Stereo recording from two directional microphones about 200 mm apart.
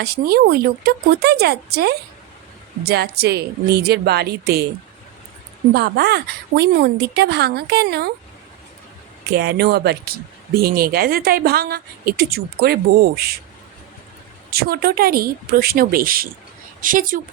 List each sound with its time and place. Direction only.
0.0 s speech: 50° right (ahead or behind)
5.7 s speech: 55° right (ahead or behind)
9.3 s speech: 55° right (ahead or behind)
14.5 s speech: 50° right (ahead or behind)